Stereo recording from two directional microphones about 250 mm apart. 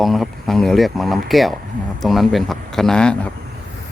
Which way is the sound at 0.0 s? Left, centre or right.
Centre.